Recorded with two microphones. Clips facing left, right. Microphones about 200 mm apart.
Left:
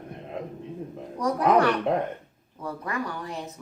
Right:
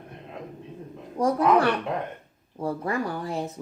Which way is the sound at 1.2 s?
30° right (ahead or behind).